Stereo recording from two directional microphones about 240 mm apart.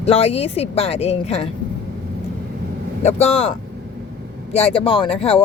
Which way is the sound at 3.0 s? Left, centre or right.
Left.